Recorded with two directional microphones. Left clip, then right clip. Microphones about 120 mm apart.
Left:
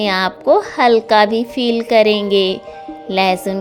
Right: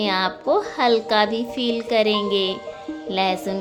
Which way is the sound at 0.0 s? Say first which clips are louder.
Left 5 dB; 55° left (ahead or behind).